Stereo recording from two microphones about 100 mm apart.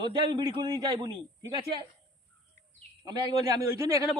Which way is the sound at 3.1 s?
45° right (ahead or behind).